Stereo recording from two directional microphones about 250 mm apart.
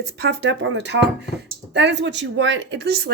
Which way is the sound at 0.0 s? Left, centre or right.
Right.